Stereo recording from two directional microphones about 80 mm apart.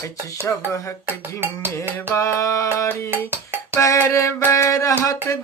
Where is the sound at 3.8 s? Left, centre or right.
Left.